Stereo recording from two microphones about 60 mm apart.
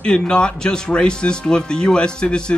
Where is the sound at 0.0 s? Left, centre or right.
Centre.